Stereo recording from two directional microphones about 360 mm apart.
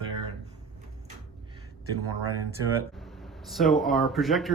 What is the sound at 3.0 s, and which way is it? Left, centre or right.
Speech, centre.